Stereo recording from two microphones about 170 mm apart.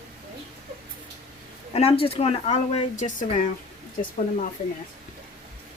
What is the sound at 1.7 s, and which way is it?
Speech, 35° left (ahead or behind).